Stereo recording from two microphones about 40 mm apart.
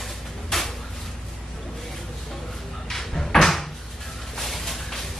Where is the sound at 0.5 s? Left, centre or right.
Centre.